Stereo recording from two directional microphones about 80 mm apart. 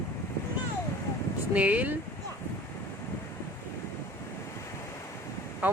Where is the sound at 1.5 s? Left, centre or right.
Centre.